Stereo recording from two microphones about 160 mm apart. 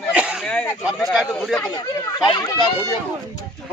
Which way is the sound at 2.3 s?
20° left (ahead or behind).